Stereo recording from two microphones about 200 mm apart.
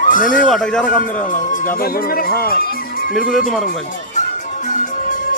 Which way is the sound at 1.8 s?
50° left (ahead or behind).